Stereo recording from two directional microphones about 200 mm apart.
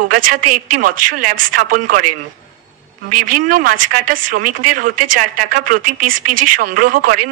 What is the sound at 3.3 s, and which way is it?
Speech, 45° right (ahead or behind).